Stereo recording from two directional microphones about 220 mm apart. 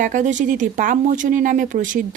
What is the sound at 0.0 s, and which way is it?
Speech, 35° right (ahead or behind).